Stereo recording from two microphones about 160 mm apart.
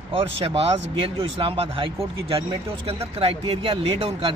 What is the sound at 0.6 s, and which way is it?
Speech, 35° right (ahead or behind).